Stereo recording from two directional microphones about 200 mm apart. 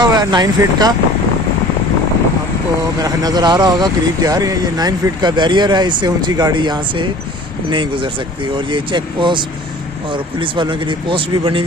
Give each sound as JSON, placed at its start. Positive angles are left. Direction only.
{"t": 0.0, "sound": "speech", "side_deg": -20}
{"t": 3.0, "sound": "speech", "side_deg": -20}